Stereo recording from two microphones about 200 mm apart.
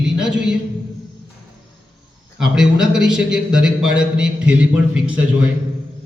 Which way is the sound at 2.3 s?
5° right (ahead or behind).